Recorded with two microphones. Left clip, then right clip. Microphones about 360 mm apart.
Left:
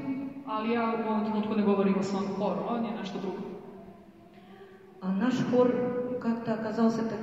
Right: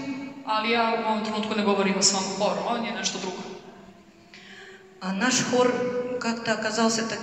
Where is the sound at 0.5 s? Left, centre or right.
Right.